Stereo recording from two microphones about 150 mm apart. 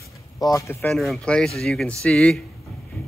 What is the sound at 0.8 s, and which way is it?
Speech, centre (ahead or behind).